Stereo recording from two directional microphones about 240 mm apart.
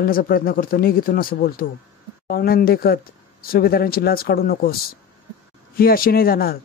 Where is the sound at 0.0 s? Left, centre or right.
Left.